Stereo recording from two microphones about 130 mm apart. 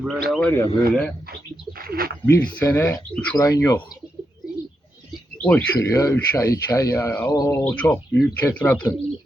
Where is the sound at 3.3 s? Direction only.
25° left (ahead or behind).